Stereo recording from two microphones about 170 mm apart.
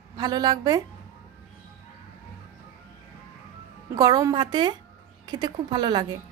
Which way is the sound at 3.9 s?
20° right (ahead or behind).